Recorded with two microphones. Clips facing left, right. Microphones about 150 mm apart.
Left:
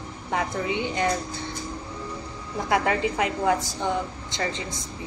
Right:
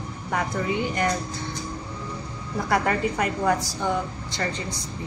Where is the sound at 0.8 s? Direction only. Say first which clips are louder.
Even; 20° left (ahead or behind).